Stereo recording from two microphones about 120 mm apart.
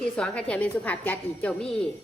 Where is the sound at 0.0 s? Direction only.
10° left (ahead or behind).